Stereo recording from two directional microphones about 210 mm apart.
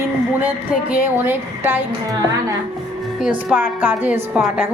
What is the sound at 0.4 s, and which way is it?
Speech, 5° right (ahead or behind).